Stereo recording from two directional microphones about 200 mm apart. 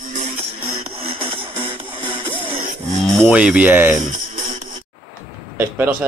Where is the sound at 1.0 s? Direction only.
25° right (ahead or behind).